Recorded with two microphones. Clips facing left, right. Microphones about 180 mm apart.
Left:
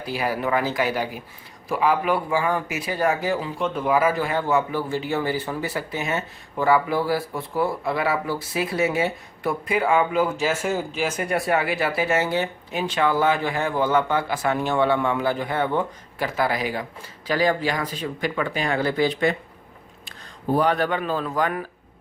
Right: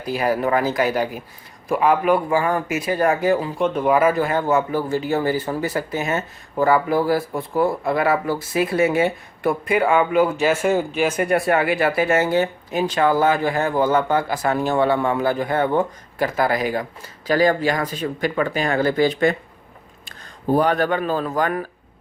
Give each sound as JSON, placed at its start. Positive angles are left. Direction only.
{"t": 0.0, "sound": "speech", "side_deg": -45}